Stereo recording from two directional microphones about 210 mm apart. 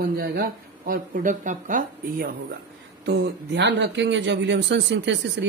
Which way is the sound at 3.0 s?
50° right (ahead or behind).